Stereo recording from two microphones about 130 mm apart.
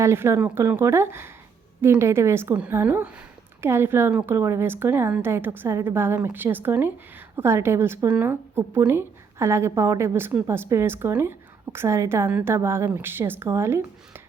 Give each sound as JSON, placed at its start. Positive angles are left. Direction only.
{"t": 0.0, "sound": "a woman's voice", "side_deg": -20}